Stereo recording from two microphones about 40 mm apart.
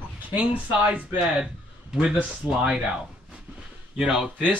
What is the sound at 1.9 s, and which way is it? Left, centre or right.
Speech, centre.